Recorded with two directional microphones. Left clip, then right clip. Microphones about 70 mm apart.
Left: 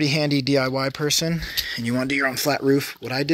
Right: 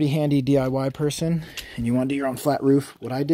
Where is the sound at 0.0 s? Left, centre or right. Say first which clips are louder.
Left 2 dB; right.